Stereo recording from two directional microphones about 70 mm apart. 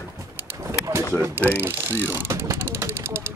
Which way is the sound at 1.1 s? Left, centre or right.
Right.